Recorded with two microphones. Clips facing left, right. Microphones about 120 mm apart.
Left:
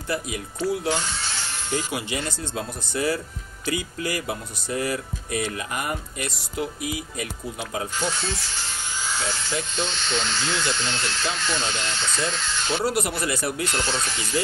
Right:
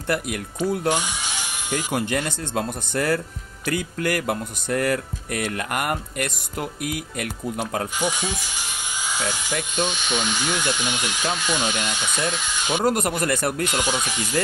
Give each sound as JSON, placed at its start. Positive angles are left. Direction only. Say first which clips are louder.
{"t": 0.1, "sound": "speech", "louder": "right 2 dB", "side_deg": -65}
{"t": 0.8, "sound": "electric shaver", "louder": "right 3 dB", "side_deg": -15}
{"t": 1.9, "sound": "speech", "louder": "right 5 dB", "side_deg": -55}
{"t": 8.0, "sound": "speech", "louder": "right 2 dB", "side_deg": -15}
{"t": 12.8, "sound": "speech", "louder": "right 5 dB", "side_deg": -50}
{"t": 13.7, "sound": "speech", "louder": "right 2 dB", "side_deg": -15}